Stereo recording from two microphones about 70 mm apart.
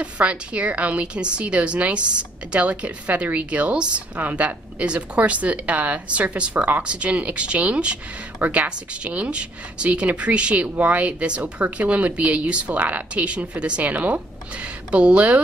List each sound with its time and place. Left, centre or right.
0.0 s a woman's voice: centre